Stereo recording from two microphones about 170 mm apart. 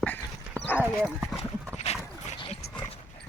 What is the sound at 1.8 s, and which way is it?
Dog, 40° left (ahead or behind).